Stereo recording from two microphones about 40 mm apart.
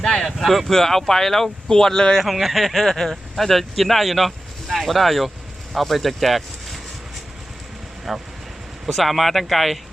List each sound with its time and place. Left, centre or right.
0.0 s a sound: centre
0.3 s speech: centre
2.1 s speech: centre
8.1 s speech: centre